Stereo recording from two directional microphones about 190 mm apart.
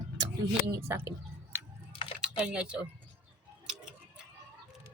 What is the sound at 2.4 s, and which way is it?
Speech, 5° right (ahead or behind).